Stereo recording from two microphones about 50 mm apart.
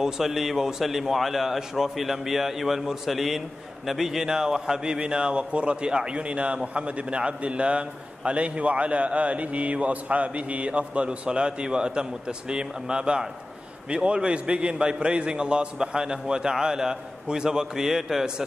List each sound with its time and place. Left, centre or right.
0.0 s a man's voice: centre